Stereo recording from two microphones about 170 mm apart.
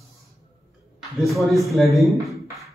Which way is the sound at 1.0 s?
Centre (ahead or behind).